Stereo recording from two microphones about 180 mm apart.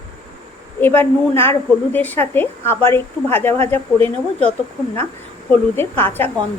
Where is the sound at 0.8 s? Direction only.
10° left (ahead or behind).